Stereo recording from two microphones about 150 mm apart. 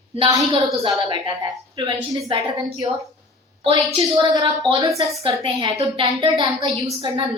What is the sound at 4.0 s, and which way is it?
A woman's voice, 25° right (ahead or behind).